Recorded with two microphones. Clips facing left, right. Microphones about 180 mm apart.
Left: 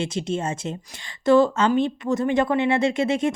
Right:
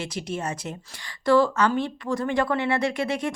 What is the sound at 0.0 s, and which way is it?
Speech, 25° left (ahead or behind).